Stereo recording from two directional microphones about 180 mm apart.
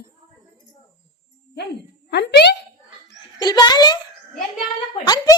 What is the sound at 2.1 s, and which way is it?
Speech, 70° left (ahead or behind).